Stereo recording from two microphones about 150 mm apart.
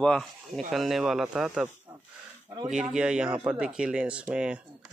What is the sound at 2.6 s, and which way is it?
Speech, 5° right (ahead or behind).